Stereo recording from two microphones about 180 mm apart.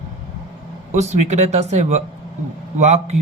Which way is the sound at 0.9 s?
40° right (ahead or behind).